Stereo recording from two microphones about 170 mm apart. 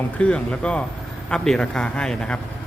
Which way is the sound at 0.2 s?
5° left (ahead or behind).